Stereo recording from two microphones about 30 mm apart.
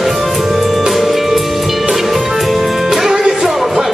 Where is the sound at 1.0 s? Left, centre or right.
Centre.